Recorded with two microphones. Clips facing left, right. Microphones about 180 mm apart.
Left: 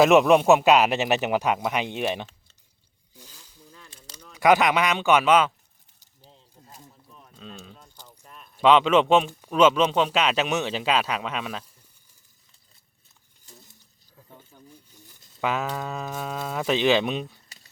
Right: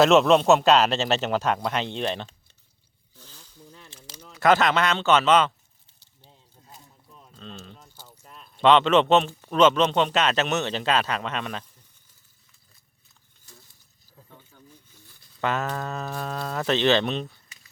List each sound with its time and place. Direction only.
0.0 s speech: 15° left (ahead or behind)
3.2 s zipper: 10° left (ahead or behind)
4.4 s speech: 15° left (ahead or behind)
7.3 s a sound: 5° left (ahead or behind)
7.9 s keys jangling: 5° right (ahead or behind)
8.4 s a man's voice: 5° left (ahead or behind)
14.3 s a sound: 15° left (ahead or behind)
15.4 s speech: 5° left (ahead or behind)